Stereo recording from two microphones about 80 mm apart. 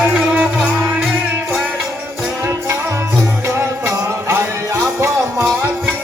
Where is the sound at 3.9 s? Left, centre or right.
Right.